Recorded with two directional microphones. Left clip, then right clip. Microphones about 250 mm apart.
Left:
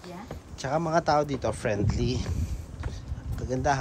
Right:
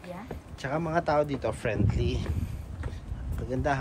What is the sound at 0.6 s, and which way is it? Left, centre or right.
Speech, left.